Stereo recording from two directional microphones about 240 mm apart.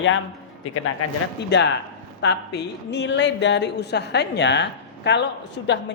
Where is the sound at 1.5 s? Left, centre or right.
Left.